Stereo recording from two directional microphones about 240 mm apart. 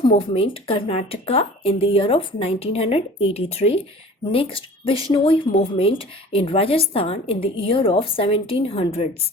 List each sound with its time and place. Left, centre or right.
0.0 s speech: left